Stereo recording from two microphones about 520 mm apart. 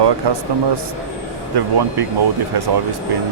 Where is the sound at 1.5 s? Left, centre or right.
Right.